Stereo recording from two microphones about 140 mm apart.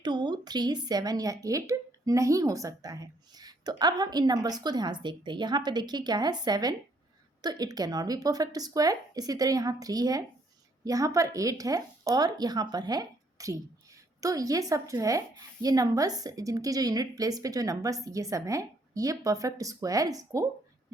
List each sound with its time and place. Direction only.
0.0 s speech: 30° right (ahead or behind)